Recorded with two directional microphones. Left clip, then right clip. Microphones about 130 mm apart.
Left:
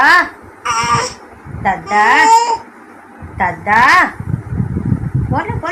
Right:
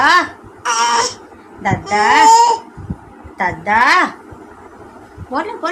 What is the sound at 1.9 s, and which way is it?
Speech, 5° left (ahead or behind).